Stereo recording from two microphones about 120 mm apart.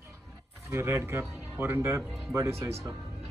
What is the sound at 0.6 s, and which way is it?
Speech, 20° right (ahead or behind).